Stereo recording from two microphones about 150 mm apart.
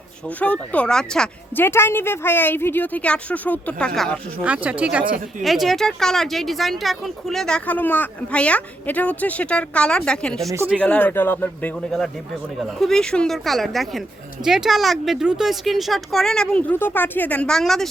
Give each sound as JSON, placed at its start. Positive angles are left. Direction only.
{"t": 0.3, "sound": "speech", "side_deg": 10}
{"t": 4.4, "sound": "speech", "side_deg": -10}
{"t": 10.5, "sound": "speech", "side_deg": -15}
{"t": 10.8, "sound": "speech", "side_deg": 10}
{"t": 11.9, "sound": "speech", "side_deg": 5}